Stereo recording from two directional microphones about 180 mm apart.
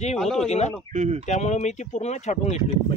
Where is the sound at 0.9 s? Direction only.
40° right (ahead or behind).